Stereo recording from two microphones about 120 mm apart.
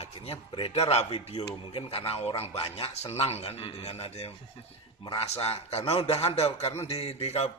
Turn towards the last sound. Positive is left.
turn(degrees=60)  # may be behind; listen again after turning